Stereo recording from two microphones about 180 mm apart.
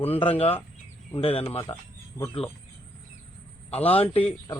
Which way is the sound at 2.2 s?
10° left (ahead or behind).